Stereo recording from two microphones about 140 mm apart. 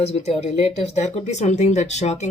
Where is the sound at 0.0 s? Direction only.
50° left (ahead or behind).